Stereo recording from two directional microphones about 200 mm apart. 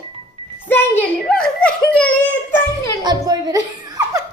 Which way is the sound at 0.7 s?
10° left (ahead or behind).